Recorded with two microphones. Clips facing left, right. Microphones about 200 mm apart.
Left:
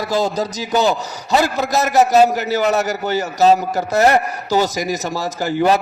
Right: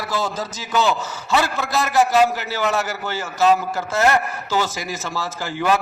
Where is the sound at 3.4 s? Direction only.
40° left (ahead or behind).